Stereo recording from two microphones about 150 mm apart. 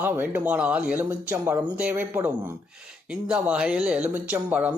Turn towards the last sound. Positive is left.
turn(degrees=-10)  # may be behind; listen again after turning